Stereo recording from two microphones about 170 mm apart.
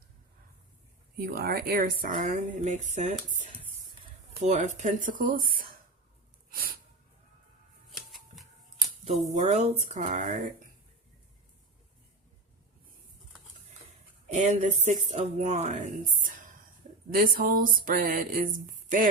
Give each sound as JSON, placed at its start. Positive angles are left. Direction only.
{"t": 1.2, "sound": "speech", "side_deg": -60}
{"t": 7.9, "sound": "a sound", "side_deg": 0}
{"t": 9.0, "sound": "speech", "side_deg": -40}
{"t": 14.3, "sound": "speech", "side_deg": -45}